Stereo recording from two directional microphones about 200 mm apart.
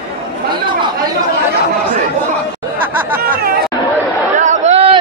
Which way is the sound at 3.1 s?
45° right (ahead or behind).